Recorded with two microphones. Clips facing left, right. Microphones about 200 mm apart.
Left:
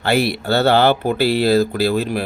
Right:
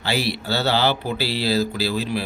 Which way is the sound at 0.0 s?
55° left (ahead or behind).